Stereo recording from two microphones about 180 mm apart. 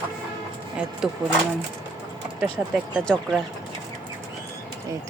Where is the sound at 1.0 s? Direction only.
5° right (ahead or behind).